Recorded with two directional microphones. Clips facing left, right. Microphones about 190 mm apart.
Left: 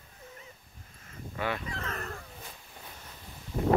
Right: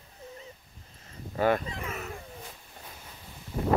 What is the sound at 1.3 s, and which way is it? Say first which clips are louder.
Speech: right 8 dB; 45° right (ahead or behind).